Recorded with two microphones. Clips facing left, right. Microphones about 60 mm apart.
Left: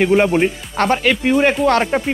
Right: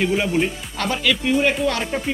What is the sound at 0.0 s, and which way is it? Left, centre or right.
Speech, left.